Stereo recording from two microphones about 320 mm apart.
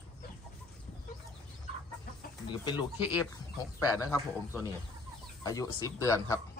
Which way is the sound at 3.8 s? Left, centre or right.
Centre.